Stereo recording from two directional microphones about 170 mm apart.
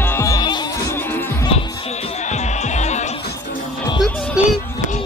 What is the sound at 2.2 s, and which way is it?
Music, 45° left (ahead or behind).